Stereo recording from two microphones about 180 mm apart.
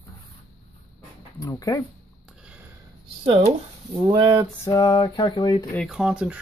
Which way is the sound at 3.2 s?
30° right (ahead or behind).